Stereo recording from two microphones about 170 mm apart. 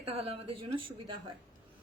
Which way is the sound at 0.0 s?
35° right (ahead or behind).